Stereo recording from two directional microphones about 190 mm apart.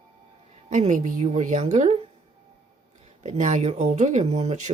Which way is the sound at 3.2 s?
40° right (ahead or behind).